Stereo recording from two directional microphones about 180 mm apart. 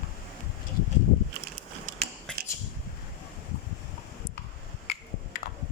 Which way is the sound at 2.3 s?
5° left (ahead or behind).